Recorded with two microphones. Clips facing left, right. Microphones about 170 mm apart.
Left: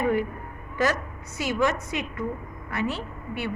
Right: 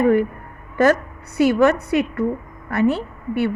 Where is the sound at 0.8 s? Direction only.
55° right (ahead or behind).